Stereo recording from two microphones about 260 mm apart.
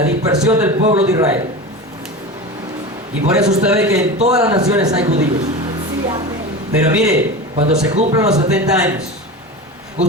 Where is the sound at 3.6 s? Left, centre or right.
Centre.